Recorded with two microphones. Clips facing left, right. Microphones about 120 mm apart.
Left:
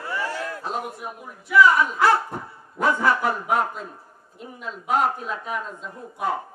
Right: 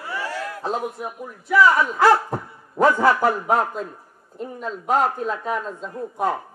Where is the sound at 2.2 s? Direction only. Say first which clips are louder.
Right 4 dB; 40° right (ahead or behind).